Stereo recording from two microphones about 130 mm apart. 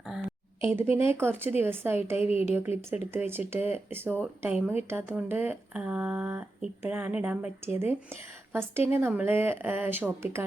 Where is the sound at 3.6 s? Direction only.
55° left (ahead or behind).